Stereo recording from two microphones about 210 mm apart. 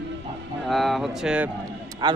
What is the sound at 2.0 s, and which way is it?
Speech, 20° right (ahead or behind).